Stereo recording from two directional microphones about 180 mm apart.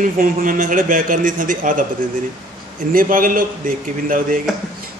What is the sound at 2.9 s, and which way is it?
A man's voice, 50° right (ahead or behind).